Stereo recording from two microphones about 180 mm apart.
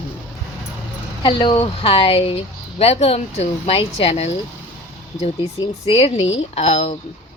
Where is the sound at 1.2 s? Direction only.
30° left (ahead or behind).